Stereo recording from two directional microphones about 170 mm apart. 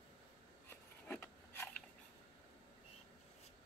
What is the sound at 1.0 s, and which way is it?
Filing, 10° left (ahead or behind).